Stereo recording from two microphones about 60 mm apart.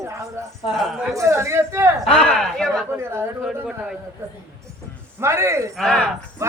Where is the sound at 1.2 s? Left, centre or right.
Right.